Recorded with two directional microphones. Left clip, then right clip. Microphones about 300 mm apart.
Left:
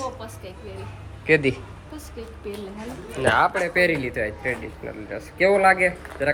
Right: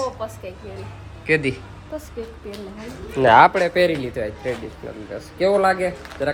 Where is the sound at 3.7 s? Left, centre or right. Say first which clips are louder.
Right 2 dB; centre.